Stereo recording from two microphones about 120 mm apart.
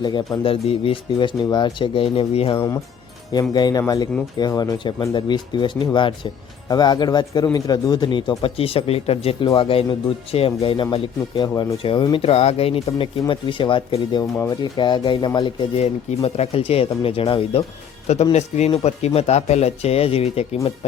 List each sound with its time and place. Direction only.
0.0 s speech: 40° left (ahead or behind)
0.4 s speech: 50° left (ahead or behind)
3.5 s speech: 35° left (ahead or behind)
14.3 s speech: 25° left (ahead or behind)
14.8 s speech: 40° left (ahead or behind)
15.8 s speech: 60° left (ahead or behind)
18.1 s speech: 65° left (ahead or behind)